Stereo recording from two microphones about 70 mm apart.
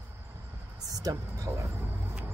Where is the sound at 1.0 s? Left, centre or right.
Right.